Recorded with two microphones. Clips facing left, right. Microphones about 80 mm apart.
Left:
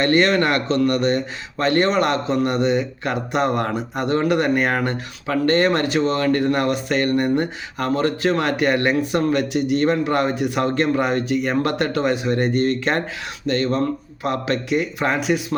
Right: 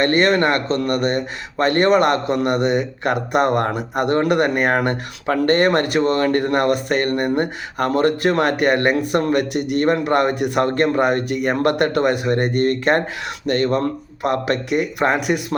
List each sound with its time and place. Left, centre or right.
0.0 s speech: right